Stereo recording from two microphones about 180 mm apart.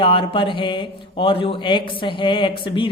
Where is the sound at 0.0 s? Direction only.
30° left (ahead or behind).